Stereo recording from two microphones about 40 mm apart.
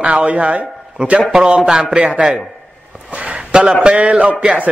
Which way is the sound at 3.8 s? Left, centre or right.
Right.